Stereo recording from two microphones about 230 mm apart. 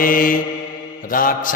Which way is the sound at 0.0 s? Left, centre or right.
Left.